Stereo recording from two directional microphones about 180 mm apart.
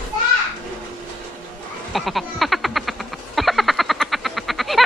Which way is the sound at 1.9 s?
Centre (ahead or behind).